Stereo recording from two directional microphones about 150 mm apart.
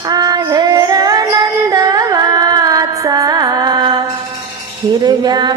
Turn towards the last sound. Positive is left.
turn(degrees=-30)  # may be behind; listen again after turning